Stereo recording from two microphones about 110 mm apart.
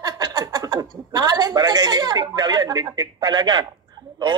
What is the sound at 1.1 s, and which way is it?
A woman's voice, 35° right (ahead or behind).